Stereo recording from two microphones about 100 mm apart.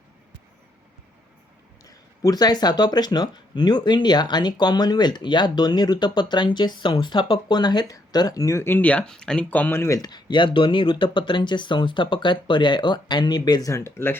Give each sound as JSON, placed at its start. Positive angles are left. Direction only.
{"t": 1.8, "sound": "speech", "side_deg": 35}
{"t": 10.0, "sound": "speech", "side_deg": 45}